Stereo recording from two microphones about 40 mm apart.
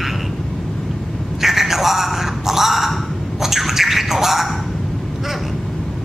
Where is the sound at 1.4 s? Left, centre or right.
Centre.